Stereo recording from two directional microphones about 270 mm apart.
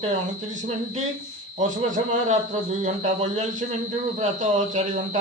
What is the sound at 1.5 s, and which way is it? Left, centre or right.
A man's voice, right.